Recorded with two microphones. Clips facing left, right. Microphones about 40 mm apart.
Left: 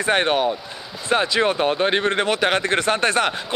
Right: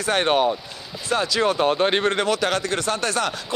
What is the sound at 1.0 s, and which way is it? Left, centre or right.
Speech, left.